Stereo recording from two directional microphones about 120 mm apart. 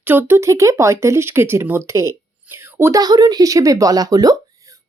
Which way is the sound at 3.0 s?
35° right (ahead or behind).